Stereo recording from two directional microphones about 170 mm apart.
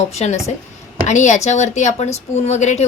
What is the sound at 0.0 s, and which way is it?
Speech, 40° left (ahead or behind).